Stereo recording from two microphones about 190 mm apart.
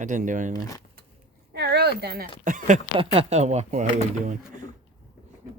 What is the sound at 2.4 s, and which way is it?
Speech, 40° right (ahead or behind).